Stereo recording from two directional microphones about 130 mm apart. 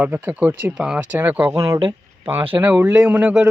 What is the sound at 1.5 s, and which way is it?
Speech, 25° right (ahead or behind).